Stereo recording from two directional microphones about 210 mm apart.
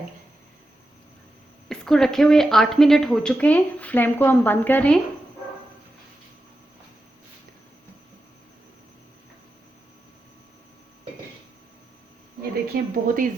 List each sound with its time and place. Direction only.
1.7 s a woman's voice: centre (ahead or behind)
12.7 s speech: 45° right (ahead or behind)